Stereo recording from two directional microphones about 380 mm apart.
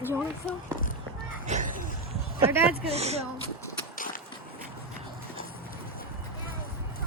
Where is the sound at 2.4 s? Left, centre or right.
Centre.